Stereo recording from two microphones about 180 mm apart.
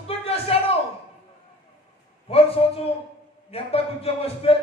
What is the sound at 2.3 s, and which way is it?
A man's voice, 35° left (ahead or behind).